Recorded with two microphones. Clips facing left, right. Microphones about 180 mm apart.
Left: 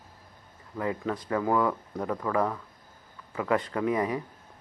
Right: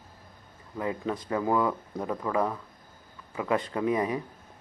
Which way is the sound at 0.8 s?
20° right (ahead or behind).